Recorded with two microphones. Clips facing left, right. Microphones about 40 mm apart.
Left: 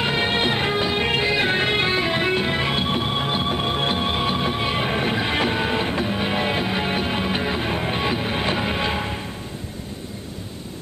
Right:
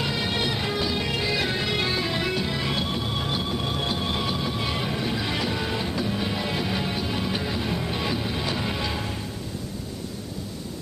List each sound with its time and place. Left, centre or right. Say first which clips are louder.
0.0 s music: left 5 dB; left